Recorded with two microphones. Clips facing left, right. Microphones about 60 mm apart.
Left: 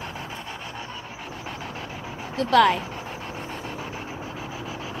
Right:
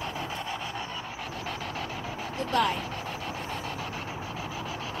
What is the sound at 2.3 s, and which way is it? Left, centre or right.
Speech, left.